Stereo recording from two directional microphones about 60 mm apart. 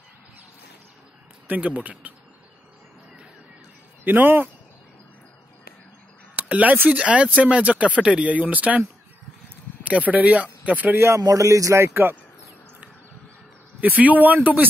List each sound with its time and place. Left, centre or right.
1.5 s speech: right
4.0 s speech: right
6.3 s speech: right
9.8 s speech: right
11.0 s speech: right
11.9 s speech: right
13.7 s speech: right